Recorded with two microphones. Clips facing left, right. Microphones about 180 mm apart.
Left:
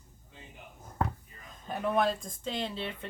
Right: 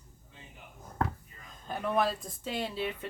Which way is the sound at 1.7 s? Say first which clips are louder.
Left 1 dB; centre (ahead or behind).